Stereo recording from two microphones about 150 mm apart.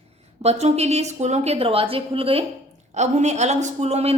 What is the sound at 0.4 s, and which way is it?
A woman's voice, 45° right (ahead or behind).